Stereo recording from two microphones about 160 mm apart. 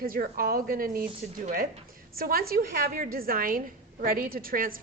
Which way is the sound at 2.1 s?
65° right (ahead or behind).